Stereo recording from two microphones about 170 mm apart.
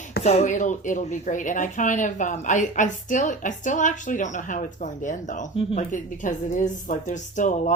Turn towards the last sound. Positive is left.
turn(degrees=45)  # may be behind; listen again after turning